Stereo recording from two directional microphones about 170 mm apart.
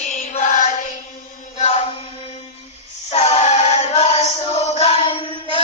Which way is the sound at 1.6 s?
40° left (ahead or behind).